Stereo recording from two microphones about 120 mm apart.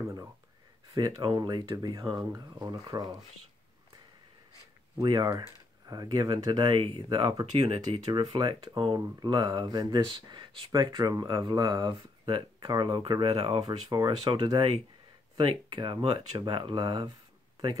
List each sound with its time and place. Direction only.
0.0 s speech: 25° right (ahead or behind)
4.9 s speech: 35° right (ahead or behind)
7.6 s speech: 55° right (ahead or behind)
8.4 s speech: 40° right (ahead or behind)
13.8 s speech: 35° right (ahead or behind)